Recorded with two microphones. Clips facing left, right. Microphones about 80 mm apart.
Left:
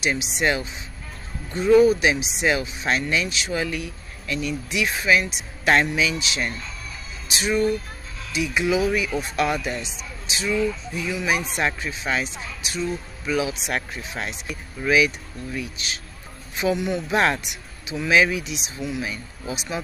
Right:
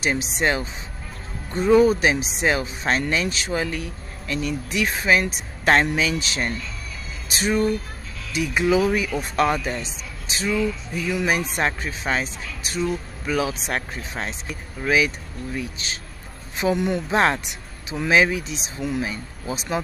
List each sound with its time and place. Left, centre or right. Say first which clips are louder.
0.0 s a man's voice: right 1 dB; right
17.1 s speech: even; right
18.8 s a man's voice: right 3 dB; right